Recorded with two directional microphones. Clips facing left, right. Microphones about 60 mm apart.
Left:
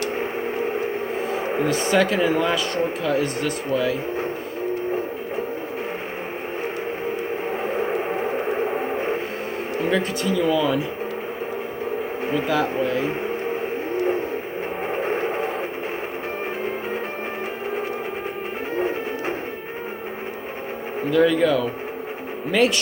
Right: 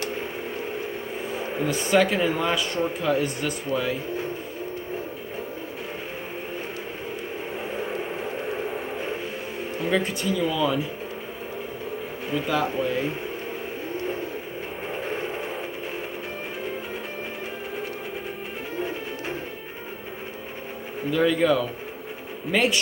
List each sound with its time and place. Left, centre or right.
1.4 s a sound: left
1.7 s speech: centre
2.5 s speech: centre
7.7 s vehicle: left
9.9 s speech: centre
15.0 s vehicle: left
18.8 s music: left
21.1 s speech: centre